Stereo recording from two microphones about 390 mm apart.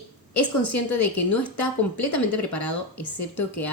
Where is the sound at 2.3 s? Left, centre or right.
Left.